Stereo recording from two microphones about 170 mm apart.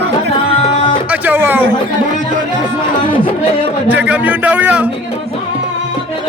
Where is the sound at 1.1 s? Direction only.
10° right (ahead or behind).